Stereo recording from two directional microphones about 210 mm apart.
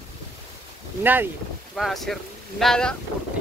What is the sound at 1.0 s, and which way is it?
Speech, 10° right (ahead or behind).